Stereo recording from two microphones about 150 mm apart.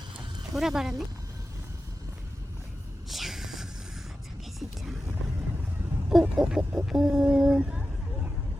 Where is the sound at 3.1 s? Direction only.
Centre (ahead or behind).